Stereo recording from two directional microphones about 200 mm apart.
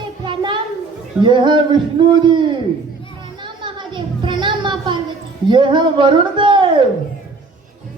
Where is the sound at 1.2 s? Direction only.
25° right (ahead or behind).